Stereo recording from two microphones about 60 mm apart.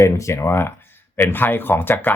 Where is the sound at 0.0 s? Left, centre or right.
Left.